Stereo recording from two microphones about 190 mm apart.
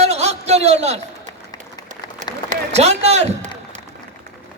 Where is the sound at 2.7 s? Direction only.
35° right (ahead or behind).